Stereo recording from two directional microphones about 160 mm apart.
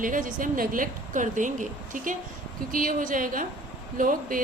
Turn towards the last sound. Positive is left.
turn(degrees=-60)  # may be behind; listen again after turning